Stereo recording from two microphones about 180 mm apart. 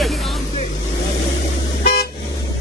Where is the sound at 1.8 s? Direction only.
60° left (ahead or behind).